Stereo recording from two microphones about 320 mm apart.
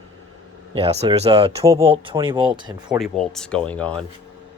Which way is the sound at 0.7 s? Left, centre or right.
Centre.